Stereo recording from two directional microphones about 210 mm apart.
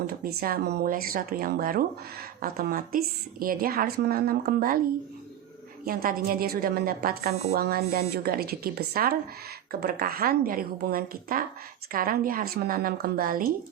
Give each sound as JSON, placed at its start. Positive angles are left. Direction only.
{"t": 0.1, "sound": "a woman's voice", "side_deg": -45}
{"t": 5.8, "sound": "a woman's voice", "side_deg": -45}